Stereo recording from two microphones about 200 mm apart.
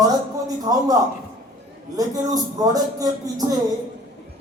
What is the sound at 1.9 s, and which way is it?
Speech, 20° right (ahead or behind).